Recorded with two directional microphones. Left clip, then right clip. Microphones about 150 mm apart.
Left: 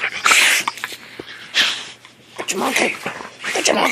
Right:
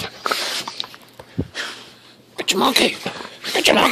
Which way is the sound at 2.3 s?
75° right (ahead or behind).